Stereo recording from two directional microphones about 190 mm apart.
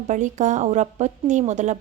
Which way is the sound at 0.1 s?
40° right (ahead or behind).